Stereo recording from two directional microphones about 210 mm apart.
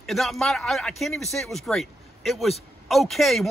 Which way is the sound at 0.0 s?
Centre (ahead or behind).